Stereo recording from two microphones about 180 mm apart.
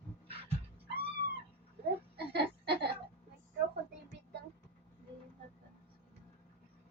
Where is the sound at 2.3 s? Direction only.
65° right (ahead or behind).